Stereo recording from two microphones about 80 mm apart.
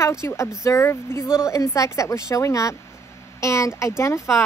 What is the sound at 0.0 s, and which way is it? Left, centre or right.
A woman's voice, left.